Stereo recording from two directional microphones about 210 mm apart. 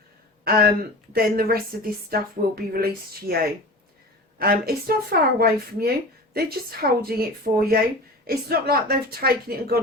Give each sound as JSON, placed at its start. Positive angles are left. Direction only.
{"t": 0.4, "sound": "speech", "side_deg": -45}